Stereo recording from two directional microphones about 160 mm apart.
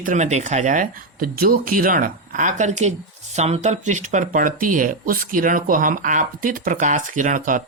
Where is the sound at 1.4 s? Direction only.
65° right (ahead or behind).